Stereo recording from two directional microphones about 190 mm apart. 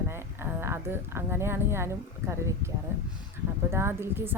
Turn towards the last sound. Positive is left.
turn(degrees=-10)  # may be behind; listen again after turning